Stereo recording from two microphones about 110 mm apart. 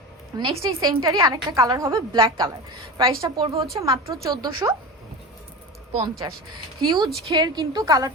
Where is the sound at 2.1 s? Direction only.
45° right (ahead or behind).